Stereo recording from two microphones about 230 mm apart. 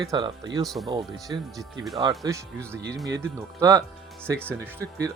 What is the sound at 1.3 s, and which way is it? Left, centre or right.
Speech, centre.